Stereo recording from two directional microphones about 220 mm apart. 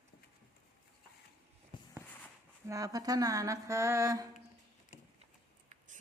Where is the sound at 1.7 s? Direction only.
20° left (ahead or behind).